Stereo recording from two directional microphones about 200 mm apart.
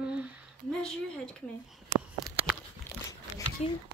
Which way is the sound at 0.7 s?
5° left (ahead or behind).